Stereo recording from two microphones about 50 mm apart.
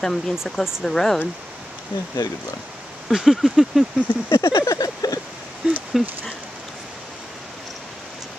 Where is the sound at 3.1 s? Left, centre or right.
Centre.